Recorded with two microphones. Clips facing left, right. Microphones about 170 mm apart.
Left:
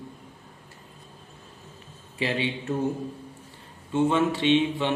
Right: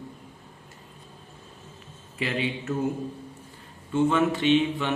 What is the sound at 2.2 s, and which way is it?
Speech, 30° left (ahead or behind).